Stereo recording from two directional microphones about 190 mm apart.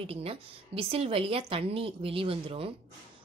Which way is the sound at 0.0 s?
30° right (ahead or behind).